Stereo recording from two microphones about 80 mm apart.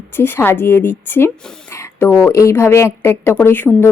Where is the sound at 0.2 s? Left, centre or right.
Left.